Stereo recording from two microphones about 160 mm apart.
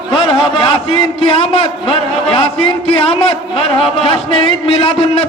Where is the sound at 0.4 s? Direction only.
30° left (ahead or behind).